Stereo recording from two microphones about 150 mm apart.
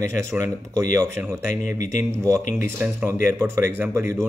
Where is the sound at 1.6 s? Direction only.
60° left (ahead or behind).